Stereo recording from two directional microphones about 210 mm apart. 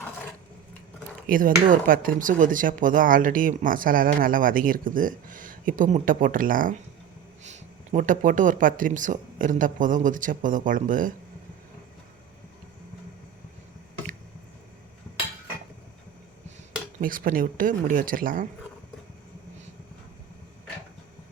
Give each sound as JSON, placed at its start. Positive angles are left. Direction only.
{"t": 1.3, "sound": "speech", "side_deg": -40}
{"t": 17.0, "sound": "speech", "side_deg": -40}